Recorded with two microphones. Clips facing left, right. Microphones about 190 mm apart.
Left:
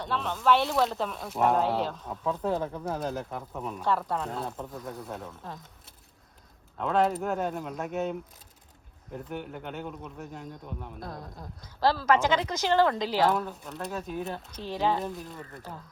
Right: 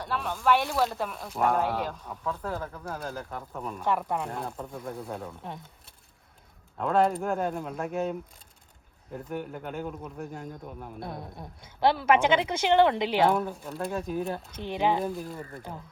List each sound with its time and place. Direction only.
0.0 s speech: 10° right (ahead or behind)
0.7 s a man's voice: centre (ahead or behind)
1.5 s speech: 10° right (ahead or behind)
2.0 s speech: 10° left (ahead or behind)
2.5 s speech: 20° left (ahead or behind)
3.2 s a man's voice: 5° left (ahead or behind)
3.8 s speech: 15° right (ahead or behind)
4.4 s a man's voice: centre (ahead or behind)
6.7 s a man's voice: centre (ahead or behind)
9.1 s a man's voice: centre (ahead or behind)
11.0 s speech: 25° right (ahead or behind); by 14.4 s centre (ahead or behind)
14.5 s speech: 20° right (ahead or behind)